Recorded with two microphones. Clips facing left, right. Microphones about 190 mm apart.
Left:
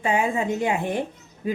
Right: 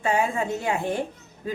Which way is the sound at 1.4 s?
15° left (ahead or behind).